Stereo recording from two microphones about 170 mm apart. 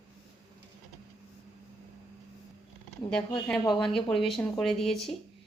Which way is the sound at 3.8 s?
Centre (ahead or behind).